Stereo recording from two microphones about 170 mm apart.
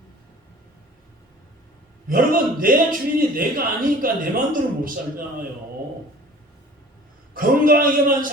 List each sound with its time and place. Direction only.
2.0 s a man's voice: 55° right (ahead or behind)
7.3 s a man's voice: 55° right (ahead or behind)